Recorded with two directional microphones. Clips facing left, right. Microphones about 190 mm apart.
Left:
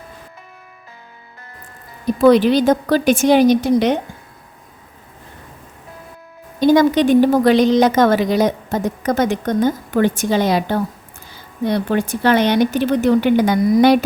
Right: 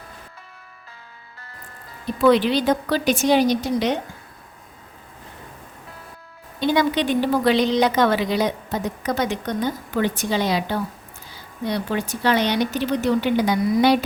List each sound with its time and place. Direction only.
2.0 s a woman's voice: 45° left (ahead or behind)
6.6 s a woman's voice: 45° left (ahead or behind)